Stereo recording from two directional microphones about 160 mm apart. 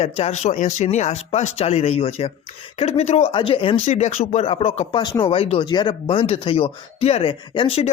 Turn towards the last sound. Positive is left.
turn(degrees=35)  # may be behind; listen again after turning